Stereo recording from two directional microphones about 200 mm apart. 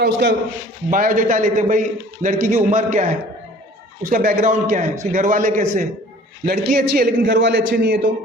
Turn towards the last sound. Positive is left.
turn(degrees=-50)  # may be behind; listen again after turning